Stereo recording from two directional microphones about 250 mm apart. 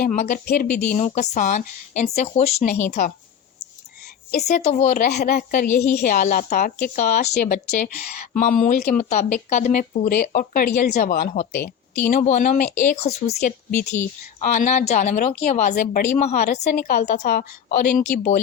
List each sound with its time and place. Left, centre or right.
0.0 s a woman's voice: left
4.3 s speech: left
5.6 s a woman's voice: centre
6.0 s a woman's voice: left